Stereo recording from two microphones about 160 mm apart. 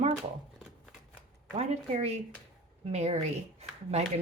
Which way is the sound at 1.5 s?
40° right (ahead or behind).